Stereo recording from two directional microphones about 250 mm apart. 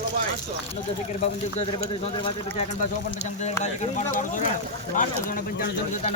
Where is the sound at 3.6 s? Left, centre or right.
Left.